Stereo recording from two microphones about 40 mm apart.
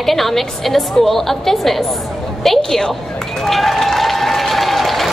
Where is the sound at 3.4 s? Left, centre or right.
Centre.